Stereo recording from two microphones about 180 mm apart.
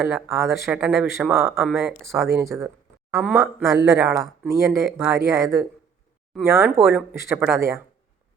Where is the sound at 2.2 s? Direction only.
15° right (ahead or behind).